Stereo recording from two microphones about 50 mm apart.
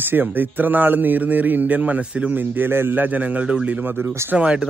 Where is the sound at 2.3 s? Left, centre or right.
Right.